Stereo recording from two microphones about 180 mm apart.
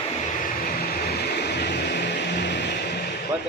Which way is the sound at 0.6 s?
55° left (ahead or behind).